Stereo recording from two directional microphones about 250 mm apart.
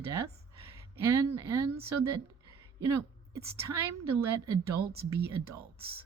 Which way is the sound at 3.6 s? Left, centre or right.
Centre.